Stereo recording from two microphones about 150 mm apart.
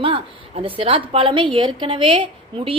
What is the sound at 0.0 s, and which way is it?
A woman's voice, 35° right (ahead or behind).